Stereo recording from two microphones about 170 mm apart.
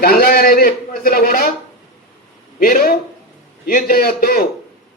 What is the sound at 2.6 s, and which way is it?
A man's voice, 60° left (ahead or behind).